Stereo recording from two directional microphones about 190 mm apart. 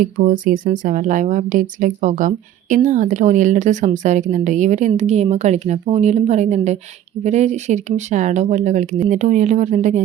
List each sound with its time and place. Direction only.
0.0 s speech: 45° right (ahead or behind)